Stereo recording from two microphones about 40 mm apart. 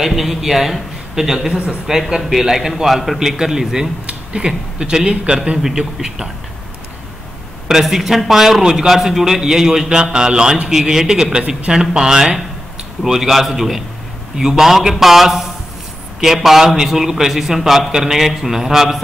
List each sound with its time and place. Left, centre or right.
0.0 s a man's voice: centre
3.2 s a man's voice: centre
4.0 s a sound: right
4.4 s a man's voice: right
5.6 s a man's voice: centre
7.8 s a man's voice: centre